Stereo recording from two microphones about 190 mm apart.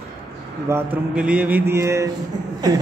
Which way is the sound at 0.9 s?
5° right (ahead or behind).